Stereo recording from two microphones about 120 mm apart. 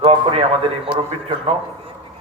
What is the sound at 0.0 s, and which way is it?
Speech, 50° right (ahead or behind).